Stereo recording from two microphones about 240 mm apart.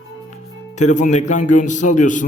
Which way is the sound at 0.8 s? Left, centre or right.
Left.